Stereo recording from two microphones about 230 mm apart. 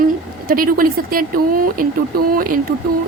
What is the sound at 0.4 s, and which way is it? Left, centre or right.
A woman's voice, right.